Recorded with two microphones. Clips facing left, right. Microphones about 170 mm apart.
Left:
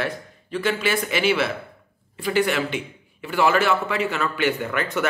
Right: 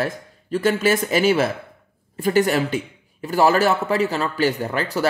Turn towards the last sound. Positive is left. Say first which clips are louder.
# right 1 dB
turn(degrees=-35)  # may be behind; listen again after turning